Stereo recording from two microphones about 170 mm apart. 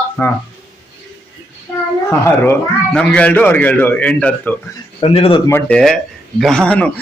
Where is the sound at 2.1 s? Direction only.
10° left (ahead or behind).